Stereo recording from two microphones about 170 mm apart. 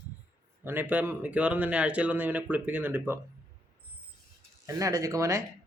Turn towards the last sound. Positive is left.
turn(degrees=-20)  # may be behind; listen again after turning